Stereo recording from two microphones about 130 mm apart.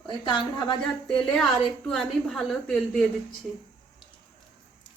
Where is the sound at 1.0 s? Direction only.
5° left (ahead or behind).